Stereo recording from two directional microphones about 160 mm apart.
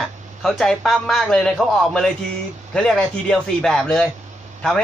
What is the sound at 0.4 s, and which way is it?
A man's voice, centre (ahead or behind).